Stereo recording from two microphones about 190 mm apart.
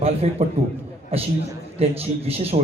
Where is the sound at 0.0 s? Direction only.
35° right (ahead or behind).